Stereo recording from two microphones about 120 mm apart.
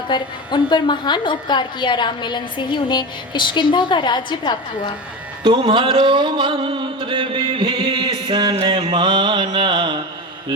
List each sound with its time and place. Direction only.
0.1 s a woman's voice: 40° left (ahead or behind)
5.4 s music: 40° right (ahead or behind)